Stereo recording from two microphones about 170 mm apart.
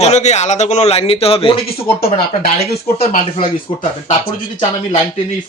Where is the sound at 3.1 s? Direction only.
55° left (ahead or behind).